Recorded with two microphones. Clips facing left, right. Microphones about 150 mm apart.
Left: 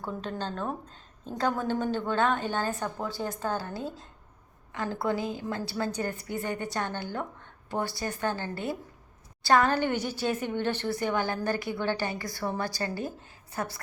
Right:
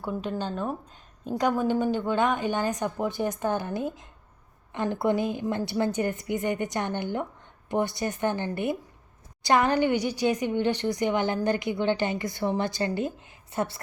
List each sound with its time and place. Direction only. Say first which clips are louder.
0.0 s a woman's voice: right 4 dB; 10° right (ahead or behind)